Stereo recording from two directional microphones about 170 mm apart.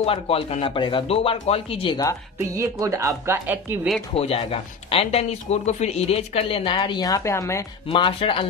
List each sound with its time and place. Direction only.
0.0 s speech: 35° left (ahead or behind)
2.5 s speech: 20° right (ahead or behind)
4.1 s speech: 35° left (ahead or behind); by 7.6 s 15° left (ahead or behind)
7.9 s speech: 30° left (ahead or behind)